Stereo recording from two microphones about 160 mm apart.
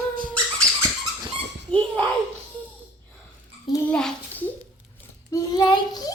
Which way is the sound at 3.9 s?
5° left (ahead or behind).